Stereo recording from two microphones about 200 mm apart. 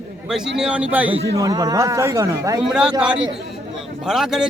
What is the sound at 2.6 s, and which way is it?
A man's voice, 5° right (ahead or behind).